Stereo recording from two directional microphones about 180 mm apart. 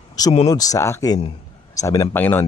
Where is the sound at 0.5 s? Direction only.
20° left (ahead or behind).